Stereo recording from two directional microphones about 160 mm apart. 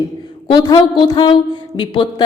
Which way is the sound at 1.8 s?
30° left (ahead or behind).